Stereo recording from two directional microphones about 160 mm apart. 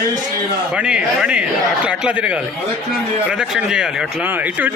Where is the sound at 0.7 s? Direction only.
5° right (ahead or behind).